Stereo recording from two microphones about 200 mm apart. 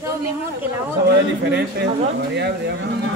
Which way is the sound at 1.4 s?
55° right (ahead or behind).